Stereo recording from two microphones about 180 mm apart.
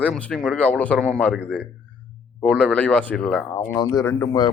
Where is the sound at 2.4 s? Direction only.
5° left (ahead or behind).